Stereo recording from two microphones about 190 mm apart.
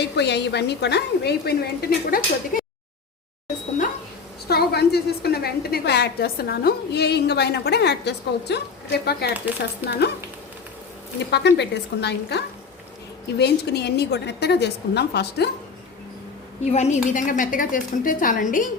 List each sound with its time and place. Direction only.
0.0 s a woman's voice: 60° left (ahead or behind)
4.4 s a woman's voice: 60° left (ahead or behind)
11.3 s a woman's voice: 65° left (ahead or behind)
16.7 s a woman's voice: 35° left (ahead or behind)